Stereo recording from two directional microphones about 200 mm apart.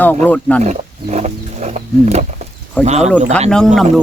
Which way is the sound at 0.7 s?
35° right (ahead or behind).